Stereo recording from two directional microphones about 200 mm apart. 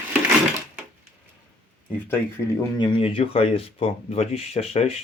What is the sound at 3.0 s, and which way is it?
Speech, 25° left (ahead or behind).